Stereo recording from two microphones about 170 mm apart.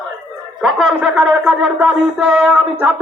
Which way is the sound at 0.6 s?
5° right (ahead or behind).